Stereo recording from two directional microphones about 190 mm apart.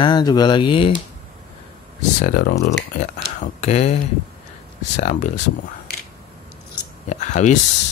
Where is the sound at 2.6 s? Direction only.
40° left (ahead or behind).